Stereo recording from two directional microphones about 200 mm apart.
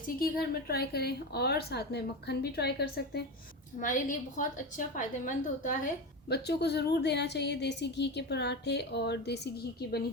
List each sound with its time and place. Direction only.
0.2 s a woman's voice: 50° left (ahead or behind)
3.8 s a woman's voice: 40° left (ahead or behind)